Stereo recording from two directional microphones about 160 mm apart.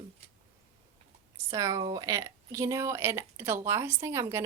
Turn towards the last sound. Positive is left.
turn(degrees=-15)  # may be behind; listen again after turning